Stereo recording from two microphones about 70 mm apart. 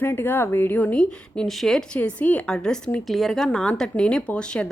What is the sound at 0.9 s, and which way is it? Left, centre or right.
Speech, centre.